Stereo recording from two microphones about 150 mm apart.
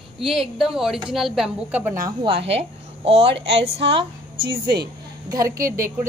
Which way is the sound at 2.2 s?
40° right (ahead or behind).